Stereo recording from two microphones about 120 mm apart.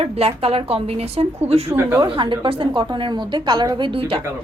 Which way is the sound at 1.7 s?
15° right (ahead or behind).